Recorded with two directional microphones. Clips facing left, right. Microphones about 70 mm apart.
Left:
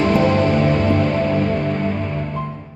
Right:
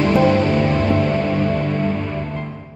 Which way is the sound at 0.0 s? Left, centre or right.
Centre.